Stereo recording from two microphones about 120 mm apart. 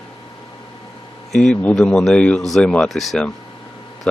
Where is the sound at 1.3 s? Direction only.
5° left (ahead or behind).